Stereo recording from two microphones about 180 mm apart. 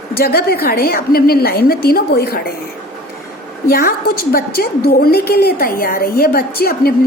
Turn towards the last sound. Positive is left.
turn(degrees=55)  # may be behind; listen again after turning